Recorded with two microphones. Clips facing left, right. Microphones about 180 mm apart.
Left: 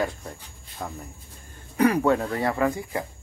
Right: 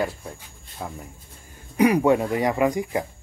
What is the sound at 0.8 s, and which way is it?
Speech, 5° right (ahead or behind).